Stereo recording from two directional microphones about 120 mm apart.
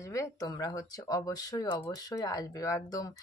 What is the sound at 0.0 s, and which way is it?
Speech, 25° left (ahead or behind).